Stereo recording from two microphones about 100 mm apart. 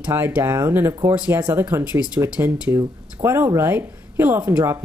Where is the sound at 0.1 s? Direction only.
20° right (ahead or behind).